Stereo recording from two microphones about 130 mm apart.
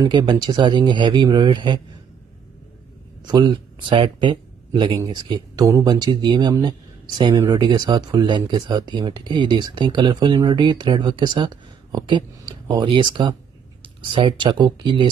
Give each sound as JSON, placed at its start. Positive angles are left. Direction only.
{"t": 0.0, "sound": "speech", "side_deg": -35}
{"t": 3.3, "sound": "speech", "side_deg": -35}